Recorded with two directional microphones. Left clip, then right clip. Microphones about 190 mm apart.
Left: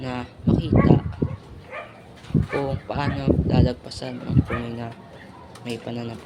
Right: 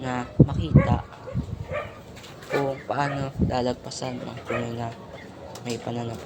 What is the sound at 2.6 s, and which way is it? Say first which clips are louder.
Speech: right 1 dB; 15° left (ahead or behind).